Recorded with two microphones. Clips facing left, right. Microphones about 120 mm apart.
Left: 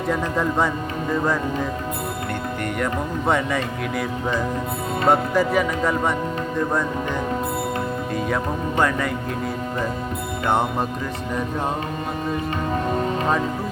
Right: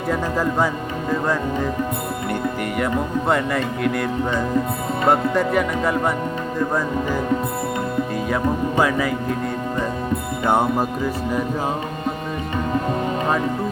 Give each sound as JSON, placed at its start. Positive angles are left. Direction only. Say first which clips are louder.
{"t": 0.1, "sound": "speech", "louder": "right 1 dB", "side_deg": 0}
{"t": 2.7, "sound": "speech", "louder": "right 3 dB", "side_deg": 0}
{"t": 8.8, "sound": "speech", "louder": "right 1 dB", "side_deg": -5}
{"t": 10.4, "sound": "speech", "louder": "right 2 dB", "side_deg": -10}